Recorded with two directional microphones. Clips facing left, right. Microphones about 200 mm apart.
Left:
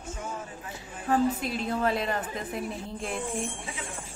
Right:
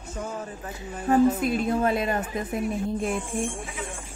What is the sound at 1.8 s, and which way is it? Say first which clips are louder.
Speech: right 3 dB; 20° right (ahead or behind).